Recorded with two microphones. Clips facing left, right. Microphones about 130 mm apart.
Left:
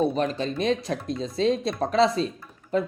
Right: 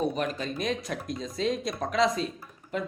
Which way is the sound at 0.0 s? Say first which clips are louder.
Left 5 dB; 30° left (ahead or behind).